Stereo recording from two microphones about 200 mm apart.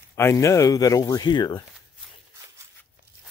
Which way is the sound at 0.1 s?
15° left (ahead or behind).